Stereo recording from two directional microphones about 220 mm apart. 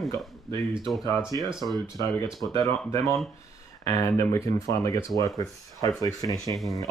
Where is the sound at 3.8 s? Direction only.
15° left (ahead or behind).